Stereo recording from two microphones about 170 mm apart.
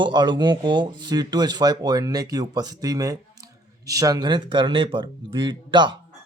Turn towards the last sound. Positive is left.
turn(degrees=-25)  # may be behind; listen again after turning